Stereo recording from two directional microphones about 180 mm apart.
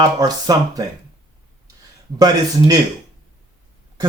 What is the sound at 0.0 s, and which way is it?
Speech, 20° right (ahead or behind).